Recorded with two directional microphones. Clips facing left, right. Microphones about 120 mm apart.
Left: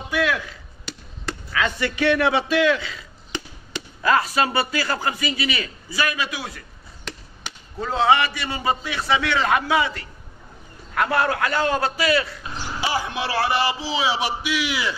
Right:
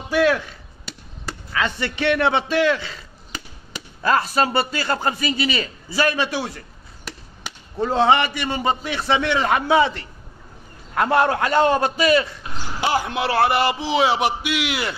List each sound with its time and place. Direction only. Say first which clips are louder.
1.5 s a man's voice: even; 25° right (ahead or behind)
4.0 s a man's voice: right 1 dB; 30° right (ahead or behind)
7.8 s a man's voice: right 2 dB; 25° right (ahead or behind)
12.8 s a man's voice: right 4 dB; 55° right (ahead or behind)